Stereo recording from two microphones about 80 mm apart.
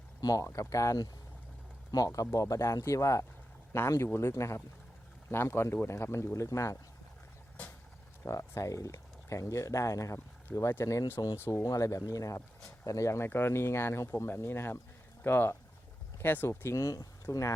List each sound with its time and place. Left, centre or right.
0.2 s speech: left
0.4 s speech: left
2.3 s speech: left
8.2 s speech: left
11.6 s speech: left
16.5 s speech: left